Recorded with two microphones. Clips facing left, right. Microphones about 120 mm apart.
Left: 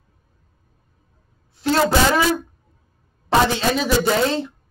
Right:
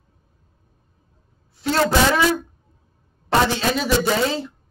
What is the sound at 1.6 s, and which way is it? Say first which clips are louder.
Speech: left 2 dB; centre (ahead or behind).